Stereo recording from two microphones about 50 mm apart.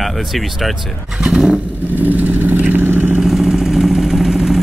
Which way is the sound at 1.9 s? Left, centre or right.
Right.